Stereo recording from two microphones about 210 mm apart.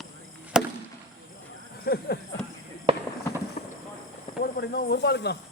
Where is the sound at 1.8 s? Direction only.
50° left (ahead or behind).